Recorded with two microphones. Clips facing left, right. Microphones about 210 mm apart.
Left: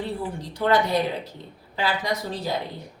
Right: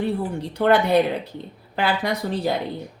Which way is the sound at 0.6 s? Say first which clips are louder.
Right 4 dB; 60° right (ahead or behind).